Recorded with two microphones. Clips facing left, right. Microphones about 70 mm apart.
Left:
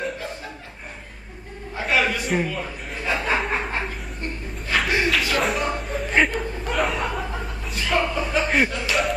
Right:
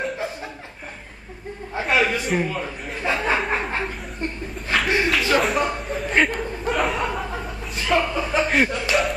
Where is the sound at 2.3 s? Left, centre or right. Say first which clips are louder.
Left 1 dB; centre.